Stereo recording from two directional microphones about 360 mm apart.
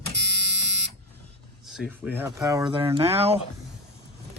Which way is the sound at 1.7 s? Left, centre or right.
Centre.